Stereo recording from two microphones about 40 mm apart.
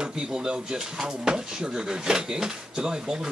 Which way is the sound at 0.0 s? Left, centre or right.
Centre.